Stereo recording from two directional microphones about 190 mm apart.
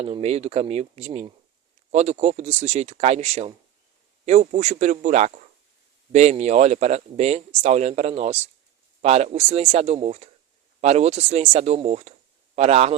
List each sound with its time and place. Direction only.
0.0 s speech: 30° right (ahead or behind)